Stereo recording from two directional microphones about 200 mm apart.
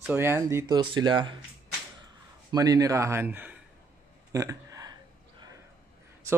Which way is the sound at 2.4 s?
20° right (ahead or behind).